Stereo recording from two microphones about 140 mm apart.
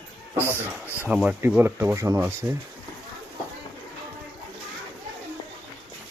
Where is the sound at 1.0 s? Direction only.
10° right (ahead or behind).